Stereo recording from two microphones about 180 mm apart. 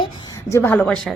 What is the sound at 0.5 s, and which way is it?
Speech, 10° left (ahead or behind).